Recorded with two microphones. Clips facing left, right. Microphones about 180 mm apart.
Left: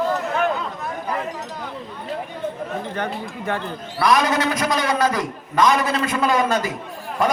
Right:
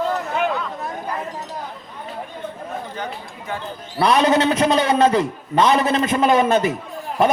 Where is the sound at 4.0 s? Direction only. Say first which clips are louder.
Right 3 dB; 30° right (ahead or behind).